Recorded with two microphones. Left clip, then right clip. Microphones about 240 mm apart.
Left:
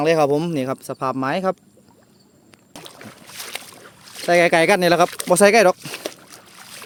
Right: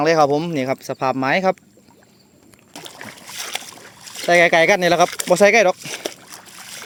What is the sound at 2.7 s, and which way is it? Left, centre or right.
Boat, right.